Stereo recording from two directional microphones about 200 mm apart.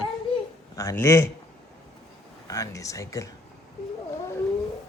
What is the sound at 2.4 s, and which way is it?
Speech, 15° left (ahead or behind).